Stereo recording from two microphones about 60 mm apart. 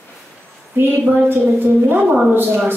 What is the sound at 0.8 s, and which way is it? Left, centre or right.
A woman's voice, right.